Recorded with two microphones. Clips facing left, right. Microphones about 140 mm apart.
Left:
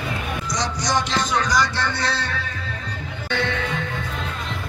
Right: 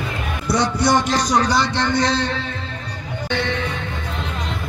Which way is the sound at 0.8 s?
45° right (ahead or behind).